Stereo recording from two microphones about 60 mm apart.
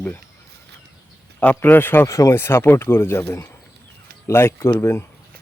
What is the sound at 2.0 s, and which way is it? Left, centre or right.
Speech, left.